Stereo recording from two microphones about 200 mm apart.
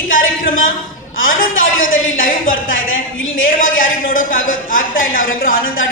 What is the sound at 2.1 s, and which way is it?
Speech, 45° left (ahead or behind).